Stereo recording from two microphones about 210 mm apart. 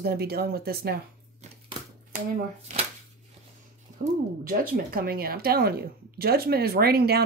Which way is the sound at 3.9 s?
35° right (ahead or behind).